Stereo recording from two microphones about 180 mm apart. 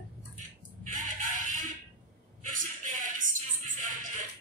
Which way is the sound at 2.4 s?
50° right (ahead or behind).